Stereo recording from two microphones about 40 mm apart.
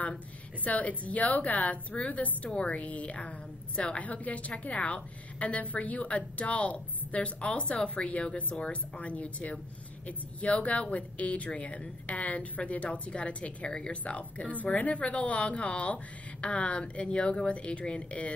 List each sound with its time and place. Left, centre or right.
0.7 s a woman's voice: left
8.5 s speech: left
9.0 s a woman's voice: left